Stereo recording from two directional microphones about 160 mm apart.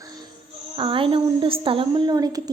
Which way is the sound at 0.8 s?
35° right (ahead or behind).